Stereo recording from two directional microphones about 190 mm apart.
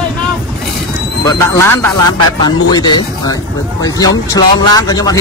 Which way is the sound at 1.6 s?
15° left (ahead or behind).